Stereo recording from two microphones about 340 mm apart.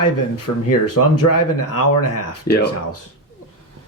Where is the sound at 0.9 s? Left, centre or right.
Left.